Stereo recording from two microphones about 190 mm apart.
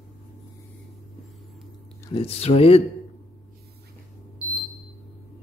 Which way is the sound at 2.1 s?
30° left (ahead or behind).